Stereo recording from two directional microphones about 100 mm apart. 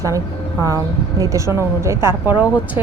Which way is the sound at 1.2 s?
30° right (ahead or behind).